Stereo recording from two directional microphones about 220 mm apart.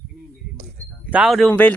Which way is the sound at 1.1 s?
5° right (ahead or behind).